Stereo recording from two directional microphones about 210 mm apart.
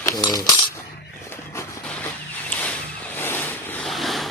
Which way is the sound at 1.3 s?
10° left (ahead or behind).